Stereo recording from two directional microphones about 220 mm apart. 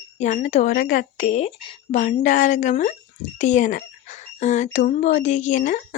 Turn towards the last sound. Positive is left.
turn(degrees=35)  # may be behind; listen again after turning